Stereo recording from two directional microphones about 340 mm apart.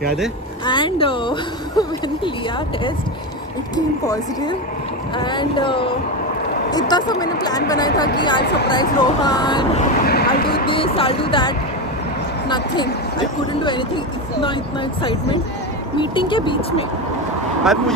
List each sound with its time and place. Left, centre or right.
0.7 s speech: centre
3.7 s speech: centre
10.0 s speech: left
10.7 s speech: centre
16.0 s speech: centre